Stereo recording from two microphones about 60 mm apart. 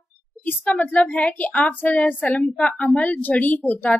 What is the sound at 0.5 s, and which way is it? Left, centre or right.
A woman's voice, left.